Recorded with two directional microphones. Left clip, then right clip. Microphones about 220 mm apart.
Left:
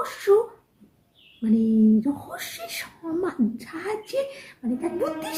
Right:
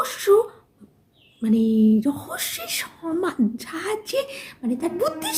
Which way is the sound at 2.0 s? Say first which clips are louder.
Right 3 dB; 45° right (ahead or behind).